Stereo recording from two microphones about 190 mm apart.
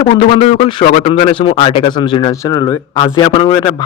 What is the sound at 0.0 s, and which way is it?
Speech, 30° left (ahead or behind).